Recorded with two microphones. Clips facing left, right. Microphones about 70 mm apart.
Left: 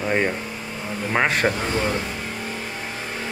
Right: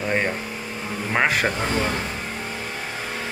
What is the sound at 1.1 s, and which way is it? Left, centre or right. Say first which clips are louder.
Speech: even; centre.